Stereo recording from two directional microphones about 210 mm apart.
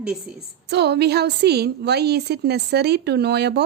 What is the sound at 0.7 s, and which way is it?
A woman's voice, 55° right (ahead or behind).